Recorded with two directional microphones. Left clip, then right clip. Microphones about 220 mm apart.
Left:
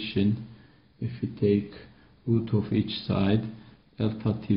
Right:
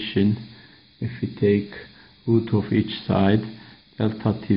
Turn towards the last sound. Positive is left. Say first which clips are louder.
# right 6 dB
turn(degrees=-30)  # may be behind; listen again after turning